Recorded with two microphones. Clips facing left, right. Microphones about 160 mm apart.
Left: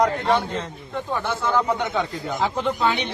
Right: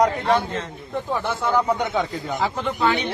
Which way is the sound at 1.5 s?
10° right (ahead or behind).